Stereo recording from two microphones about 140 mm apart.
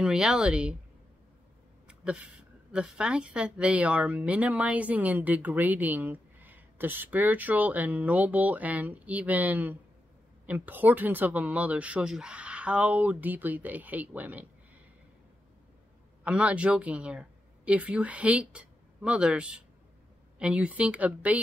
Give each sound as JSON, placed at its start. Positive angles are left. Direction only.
{"t": 0.0, "sound": "speech", "side_deg": -5}
{"t": 1.9, "sound": "a woman's voice", "side_deg": -5}
{"t": 16.3, "sound": "a woman's voice", "side_deg": -10}